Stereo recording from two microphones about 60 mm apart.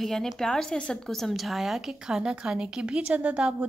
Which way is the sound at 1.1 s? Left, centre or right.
Centre.